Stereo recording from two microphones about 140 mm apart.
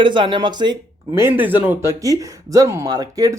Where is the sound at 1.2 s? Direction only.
15° right (ahead or behind).